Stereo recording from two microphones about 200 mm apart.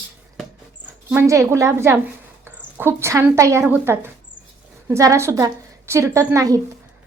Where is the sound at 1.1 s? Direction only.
15° right (ahead or behind).